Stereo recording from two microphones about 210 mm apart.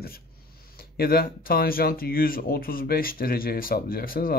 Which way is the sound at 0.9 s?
45° left (ahead or behind).